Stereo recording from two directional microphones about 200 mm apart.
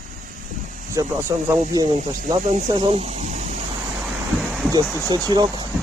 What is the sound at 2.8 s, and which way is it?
Speech, 30° right (ahead or behind).